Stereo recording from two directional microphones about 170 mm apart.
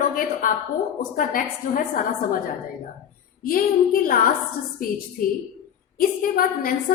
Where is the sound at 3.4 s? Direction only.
60° left (ahead or behind).